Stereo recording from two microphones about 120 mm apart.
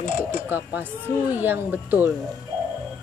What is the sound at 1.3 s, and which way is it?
Speech, 15° right (ahead or behind).